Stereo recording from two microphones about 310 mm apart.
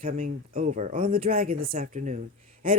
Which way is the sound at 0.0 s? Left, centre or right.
Right.